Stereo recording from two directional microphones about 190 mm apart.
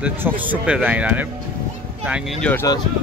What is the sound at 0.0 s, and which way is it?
A man's voice, 5° right (ahead or behind).